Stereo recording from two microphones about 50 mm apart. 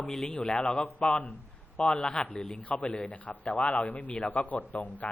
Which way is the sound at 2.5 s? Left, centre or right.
Left.